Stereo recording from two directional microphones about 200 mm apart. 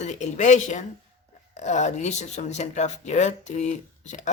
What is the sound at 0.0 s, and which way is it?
Speech, 35° left (ahead or behind).